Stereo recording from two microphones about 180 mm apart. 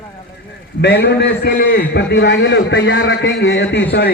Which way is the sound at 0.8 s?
65° left (ahead or behind).